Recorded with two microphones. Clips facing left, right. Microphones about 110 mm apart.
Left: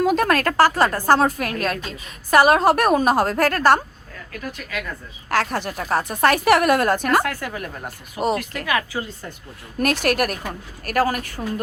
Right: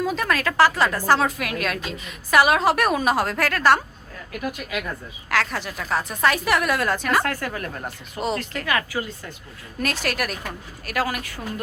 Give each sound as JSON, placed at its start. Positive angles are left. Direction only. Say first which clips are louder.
{"t": 0.0, "sound": "a woman's voice", "louder": "left 5 dB", "side_deg": 55}
{"t": 4.3, "sound": "speech", "louder": "right 3 dB", "side_deg": -15}
{"t": 5.3, "sound": "a woman's voice", "louder": "left 3 dB", "side_deg": 45}
{"t": 5.8, "sound": "speech", "louder": "left 3 dB", "side_deg": 35}
{"t": 6.2, "sound": "a woman's voice", "louder": "left 5 dB", "side_deg": 60}
{"t": 7.2, "sound": "speech", "louder": "left 1 dB", "side_deg": 10}
{"t": 8.6, "sound": "speech", "louder": "even", "side_deg": 20}
{"t": 9.8, "sound": "a woman's voice", "louder": "left 6 dB", "side_deg": 60}